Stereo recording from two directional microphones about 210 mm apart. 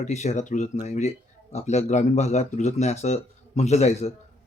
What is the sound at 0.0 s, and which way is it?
Speech, 35° left (ahead or behind).